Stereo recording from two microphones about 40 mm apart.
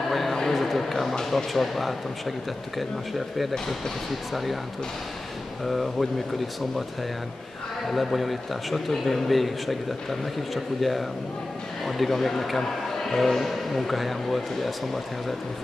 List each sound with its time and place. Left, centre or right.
0.1 s a sound: centre
1.3 s a man's voice: centre
3.5 s speech: centre
4.3 s a man's voice: centre
5.7 s a man's voice: centre
7.9 s a man's voice: centre